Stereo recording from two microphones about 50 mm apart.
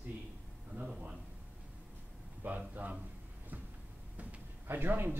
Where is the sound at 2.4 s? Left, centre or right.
Right.